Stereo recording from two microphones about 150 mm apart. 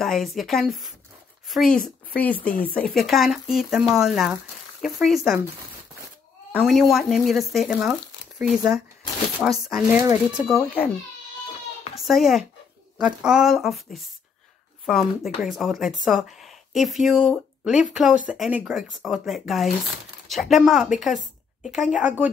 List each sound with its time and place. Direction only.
0.0 s speech: centre (ahead or behind)
6.5 s speech: centre (ahead or behind)
11.9 s speech: centre (ahead or behind)